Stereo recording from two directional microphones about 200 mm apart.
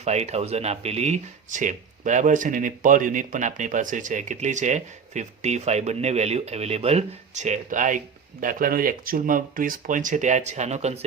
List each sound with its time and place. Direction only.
0.0 s speech: 35° right (ahead or behind)